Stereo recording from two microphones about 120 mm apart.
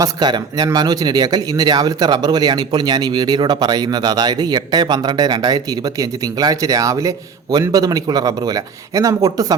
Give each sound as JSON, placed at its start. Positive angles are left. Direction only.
{"t": 0.0, "sound": "speech", "side_deg": -35}